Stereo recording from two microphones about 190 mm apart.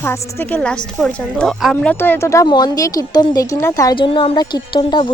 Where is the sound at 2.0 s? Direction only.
15° left (ahead or behind).